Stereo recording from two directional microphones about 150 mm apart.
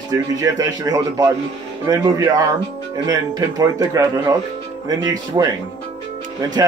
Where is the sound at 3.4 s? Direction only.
25° right (ahead or behind).